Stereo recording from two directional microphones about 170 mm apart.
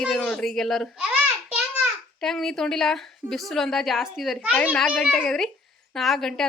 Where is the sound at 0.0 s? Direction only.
Centre (ahead or behind).